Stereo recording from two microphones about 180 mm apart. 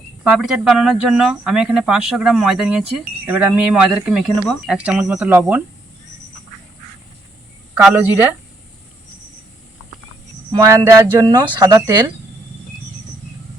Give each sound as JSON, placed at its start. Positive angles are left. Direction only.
{"t": 0.3, "sound": "speech", "side_deg": -5}
{"t": 7.8, "sound": "speech", "side_deg": -5}
{"t": 10.5, "sound": "speech", "side_deg": -20}
{"t": 11.6, "sound": "speech", "side_deg": -15}